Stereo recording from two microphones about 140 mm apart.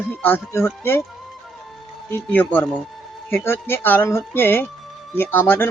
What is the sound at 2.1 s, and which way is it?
Speech, 15° left (ahead or behind).